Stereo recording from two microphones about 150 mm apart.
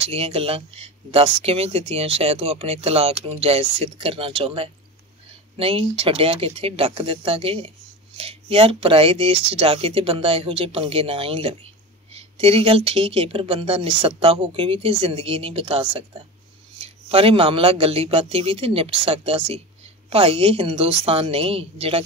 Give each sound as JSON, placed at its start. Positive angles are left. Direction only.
{"t": 0.0, "sound": "speech", "side_deg": -40}